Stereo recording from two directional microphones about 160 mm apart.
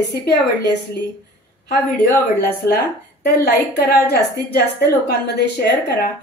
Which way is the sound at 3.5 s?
75° left (ahead or behind).